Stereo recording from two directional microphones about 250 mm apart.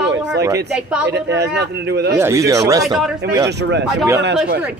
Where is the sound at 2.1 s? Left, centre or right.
Centre.